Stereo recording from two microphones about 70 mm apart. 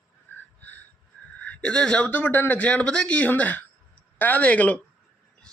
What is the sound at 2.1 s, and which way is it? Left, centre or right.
Speech, left.